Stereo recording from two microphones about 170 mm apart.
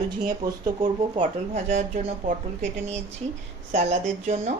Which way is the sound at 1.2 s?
45° right (ahead or behind).